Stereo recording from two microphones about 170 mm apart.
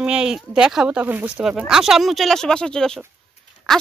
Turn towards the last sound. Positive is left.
turn(degrees=0)  # may be behind; listen again after turning